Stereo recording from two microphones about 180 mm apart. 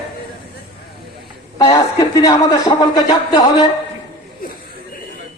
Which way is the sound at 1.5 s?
20° left (ahead or behind).